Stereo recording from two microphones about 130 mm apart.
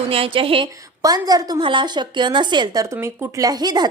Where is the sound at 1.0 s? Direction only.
30° right (ahead or behind).